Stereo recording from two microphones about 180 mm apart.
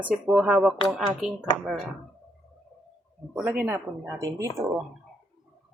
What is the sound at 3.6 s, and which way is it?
Speech, 15° right (ahead or behind).